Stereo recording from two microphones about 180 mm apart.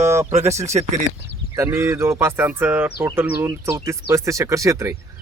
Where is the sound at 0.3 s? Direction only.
40° right (ahead or behind).